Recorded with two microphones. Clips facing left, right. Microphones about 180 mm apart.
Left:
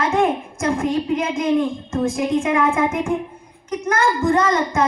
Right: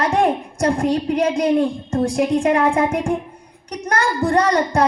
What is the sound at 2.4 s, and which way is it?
A woman's voice, 35° right (ahead or behind).